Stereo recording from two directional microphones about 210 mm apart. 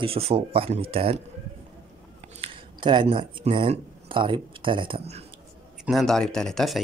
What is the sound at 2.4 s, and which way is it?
Speech, 25° right (ahead or behind).